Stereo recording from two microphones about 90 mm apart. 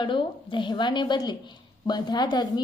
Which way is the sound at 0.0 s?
65° left (ahead or behind).